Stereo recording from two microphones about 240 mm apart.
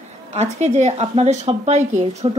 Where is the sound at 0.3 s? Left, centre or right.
Right.